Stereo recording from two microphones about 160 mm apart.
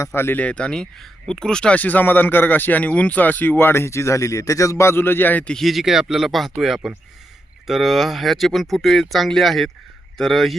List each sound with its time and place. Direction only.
0.0 s speech: 15° left (ahead or behind)